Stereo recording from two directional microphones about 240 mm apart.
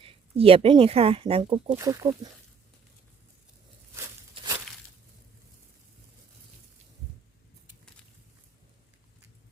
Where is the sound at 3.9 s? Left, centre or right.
Centre.